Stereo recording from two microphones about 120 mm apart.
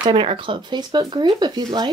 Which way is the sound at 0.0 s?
45° right (ahead or behind).